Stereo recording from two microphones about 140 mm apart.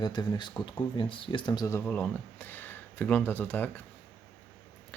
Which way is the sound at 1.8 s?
10° left (ahead or behind).